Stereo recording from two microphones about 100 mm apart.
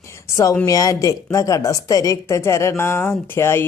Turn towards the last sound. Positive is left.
turn(degrees=25)  # may be behind; listen again after turning